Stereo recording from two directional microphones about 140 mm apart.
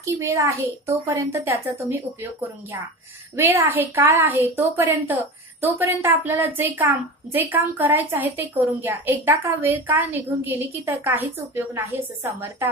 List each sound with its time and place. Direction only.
0.0 s a child's voice: 20° right (ahead or behind)
3.3 s a woman's voice: 15° right (ahead or behind)